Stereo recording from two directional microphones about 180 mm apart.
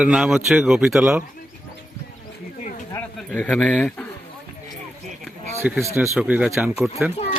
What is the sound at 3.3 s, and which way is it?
Speech, 5° left (ahead or behind).